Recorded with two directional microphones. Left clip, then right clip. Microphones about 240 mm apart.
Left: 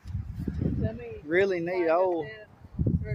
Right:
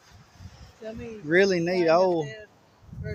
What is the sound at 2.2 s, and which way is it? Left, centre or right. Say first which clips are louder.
Speech: right 4 dB; right.